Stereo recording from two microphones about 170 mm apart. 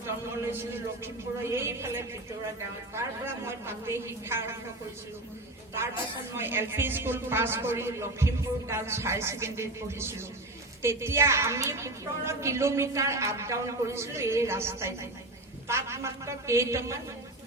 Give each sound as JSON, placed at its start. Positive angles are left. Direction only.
{"t": 0.0, "sound": "a man's voice", "side_deg": -15}
{"t": 6.3, "sound": "a woman's voice", "side_deg": -15}